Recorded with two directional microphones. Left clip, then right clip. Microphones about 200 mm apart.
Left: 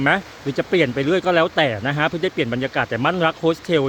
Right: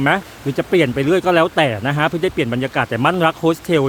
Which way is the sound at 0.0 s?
5° right (ahead or behind).